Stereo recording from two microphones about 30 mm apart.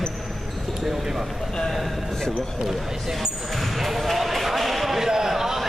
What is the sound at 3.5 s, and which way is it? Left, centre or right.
Basketball bounce, centre.